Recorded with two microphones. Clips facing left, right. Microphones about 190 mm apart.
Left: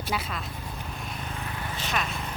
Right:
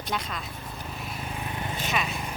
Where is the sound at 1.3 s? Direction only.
15° right (ahead or behind).